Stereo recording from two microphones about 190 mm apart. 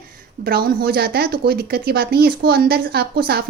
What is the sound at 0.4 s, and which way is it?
Speech, 55° right (ahead or behind).